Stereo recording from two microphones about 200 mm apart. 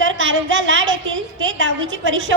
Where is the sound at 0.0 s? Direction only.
70° right (ahead or behind).